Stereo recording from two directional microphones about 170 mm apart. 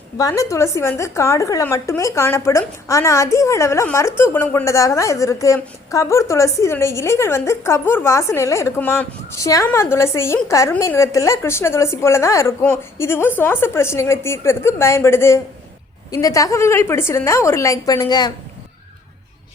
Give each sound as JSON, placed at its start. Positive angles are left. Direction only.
{"t": 0.2, "sound": "a woman's voice", "side_deg": 20}